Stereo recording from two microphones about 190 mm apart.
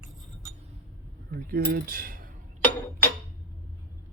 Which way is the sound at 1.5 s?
50° right (ahead or behind).